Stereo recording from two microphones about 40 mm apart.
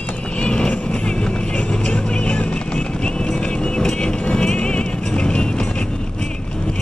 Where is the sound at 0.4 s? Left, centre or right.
Left.